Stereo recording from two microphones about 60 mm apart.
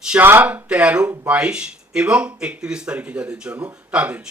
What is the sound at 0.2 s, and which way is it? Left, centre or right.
Speech, right.